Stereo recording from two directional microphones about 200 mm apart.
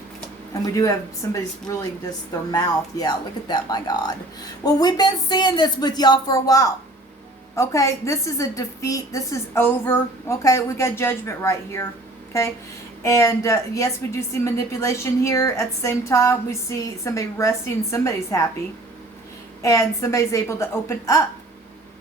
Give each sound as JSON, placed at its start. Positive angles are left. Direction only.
{"t": 0.5, "sound": "a woman's voice", "side_deg": 15}
{"t": 13.1, "sound": "a woman's voice", "side_deg": 15}
{"t": 19.6, "sound": "a woman's voice", "side_deg": 15}